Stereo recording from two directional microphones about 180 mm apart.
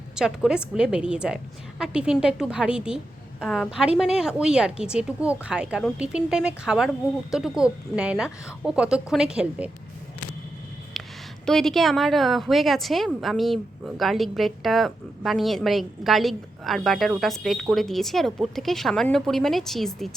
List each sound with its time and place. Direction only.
0.2 s a woman's voice: 5° right (ahead or behind)
11.0 s a sound: centre (ahead or behind)
11.4 s a woman's voice: centre (ahead or behind)